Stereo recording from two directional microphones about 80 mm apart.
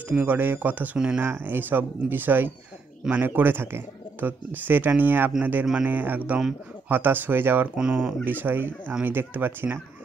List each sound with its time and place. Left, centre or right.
0.1 s speech: right
0.9 s speech: centre
1.2 s speech: right